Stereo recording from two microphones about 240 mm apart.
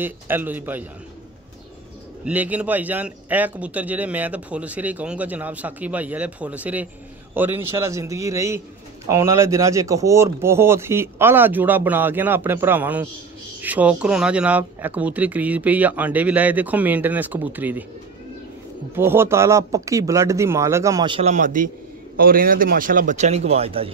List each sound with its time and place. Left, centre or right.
0.0 s a man's voice: centre
2.2 s a man's voice: centre
18.9 s a man's voice: centre